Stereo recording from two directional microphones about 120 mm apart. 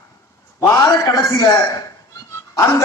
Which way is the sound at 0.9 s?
30° left (ahead or behind).